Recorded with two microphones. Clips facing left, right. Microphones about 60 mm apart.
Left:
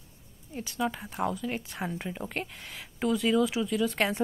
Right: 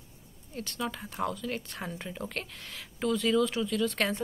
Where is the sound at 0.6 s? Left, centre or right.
Centre.